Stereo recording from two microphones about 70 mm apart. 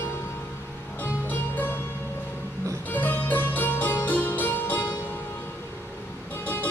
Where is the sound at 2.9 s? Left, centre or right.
Left.